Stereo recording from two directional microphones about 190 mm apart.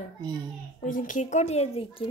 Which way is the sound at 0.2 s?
20° right (ahead or behind).